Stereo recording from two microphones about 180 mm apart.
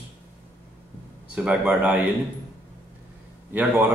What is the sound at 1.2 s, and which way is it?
Speech, 5° right (ahead or behind).